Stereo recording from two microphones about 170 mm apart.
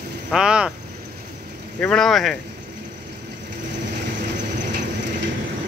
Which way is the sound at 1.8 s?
5° left (ahead or behind).